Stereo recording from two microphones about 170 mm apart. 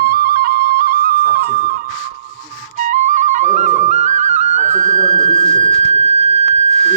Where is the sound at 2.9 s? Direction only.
45° right (ahead or behind).